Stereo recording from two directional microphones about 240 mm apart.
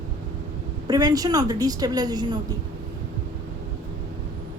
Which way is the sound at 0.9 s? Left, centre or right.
Centre.